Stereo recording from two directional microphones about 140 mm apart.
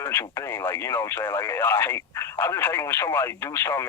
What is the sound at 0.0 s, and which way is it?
Speech, 15° left (ahead or behind).